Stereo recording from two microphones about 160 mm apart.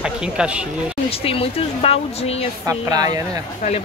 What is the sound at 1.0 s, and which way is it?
Speech, 35° left (ahead or behind).